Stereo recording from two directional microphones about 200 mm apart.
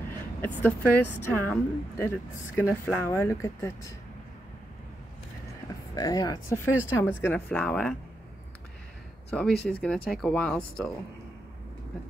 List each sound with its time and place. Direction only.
0.4 s a woman's voice: 10° left (ahead or behind)
5.9 s a woman's voice: 20° left (ahead or behind)
9.4 s speech: 5° left (ahead or behind)